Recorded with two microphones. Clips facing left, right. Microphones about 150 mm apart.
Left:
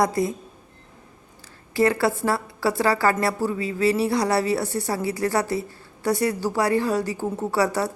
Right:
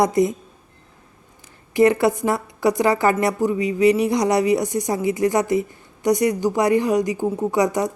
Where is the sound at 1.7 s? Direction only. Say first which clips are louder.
Right 5 dB; 20° right (ahead or behind).